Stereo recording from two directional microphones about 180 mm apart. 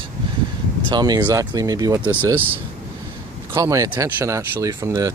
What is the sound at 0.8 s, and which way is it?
Speech, 20° right (ahead or behind).